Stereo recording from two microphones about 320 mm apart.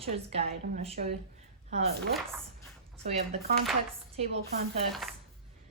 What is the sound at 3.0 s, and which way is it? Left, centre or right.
A woman's voice, right.